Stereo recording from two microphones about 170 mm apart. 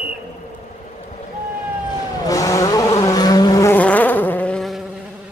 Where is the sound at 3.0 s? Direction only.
20° left (ahead or behind); by 4.8 s centre (ahead or behind).